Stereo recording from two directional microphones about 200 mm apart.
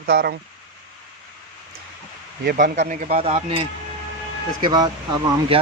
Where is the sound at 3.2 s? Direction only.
30° right (ahead or behind).